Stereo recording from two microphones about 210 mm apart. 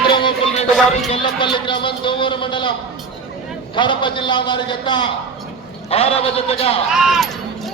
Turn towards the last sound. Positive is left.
turn(degrees=0)  # may be behind; listen again after turning